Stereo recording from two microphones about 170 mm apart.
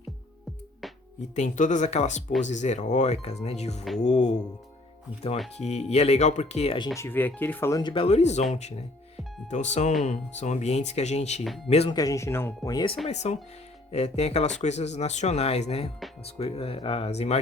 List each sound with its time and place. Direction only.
1.4 s speech: 45° left (ahead or behind)
5.5 s speech: 40° left (ahead or behind)
6.8 s speech: 15° left (ahead or behind); by 11.4 s 40° left (ahead or behind)
11.4 s speech: centre (ahead or behind)
11.7 s speech: 35° left (ahead or behind)
11.9 s speech: 20° left (ahead or behind)
13.1 s speech: 40° left (ahead or behind)